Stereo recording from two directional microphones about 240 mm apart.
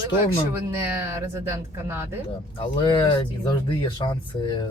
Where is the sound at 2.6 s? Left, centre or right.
Left.